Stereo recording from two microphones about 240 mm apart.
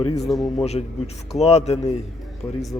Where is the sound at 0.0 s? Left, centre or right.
Centre.